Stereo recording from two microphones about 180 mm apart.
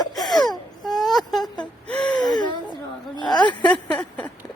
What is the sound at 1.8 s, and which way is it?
Gasp, 5° left (ahead or behind).